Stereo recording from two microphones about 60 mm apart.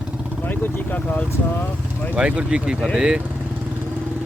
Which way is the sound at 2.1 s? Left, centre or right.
Centre.